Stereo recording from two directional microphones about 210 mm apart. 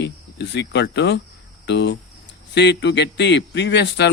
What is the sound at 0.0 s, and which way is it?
Speech, 55° left (ahead or behind).